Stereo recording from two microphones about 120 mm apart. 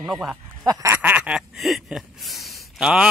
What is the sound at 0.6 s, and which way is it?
Speech, 30° right (ahead or behind).